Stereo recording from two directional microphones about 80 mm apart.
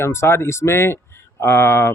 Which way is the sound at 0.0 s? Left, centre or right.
Left.